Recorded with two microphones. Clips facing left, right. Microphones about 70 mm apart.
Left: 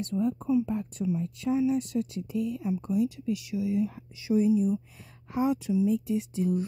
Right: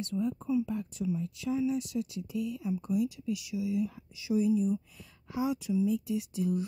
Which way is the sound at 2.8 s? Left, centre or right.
Left.